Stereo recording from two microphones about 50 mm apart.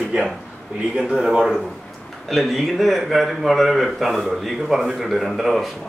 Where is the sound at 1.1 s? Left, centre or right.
Centre.